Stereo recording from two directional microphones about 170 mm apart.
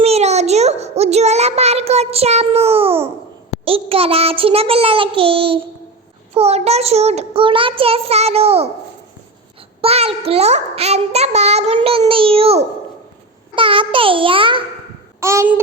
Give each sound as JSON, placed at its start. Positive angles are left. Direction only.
{"t": 0.0, "sound": "a child's voice", "side_deg": -40}
{"t": 9.8, "sound": "a child's voice", "side_deg": -35}
{"t": 15.2, "sound": "babbling", "side_deg": -15}